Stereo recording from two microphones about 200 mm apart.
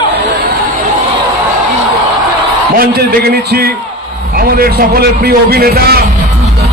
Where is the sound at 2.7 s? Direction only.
50° right (ahead or behind).